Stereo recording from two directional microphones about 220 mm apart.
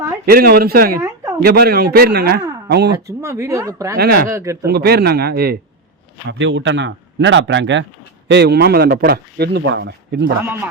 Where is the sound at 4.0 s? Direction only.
45° right (ahead or behind).